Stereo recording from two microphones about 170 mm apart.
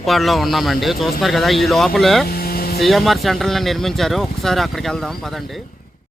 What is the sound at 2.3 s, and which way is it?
Vehicle, 60° left (ahead or behind).